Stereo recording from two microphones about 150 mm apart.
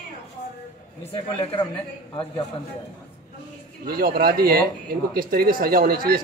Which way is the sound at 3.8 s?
90° right.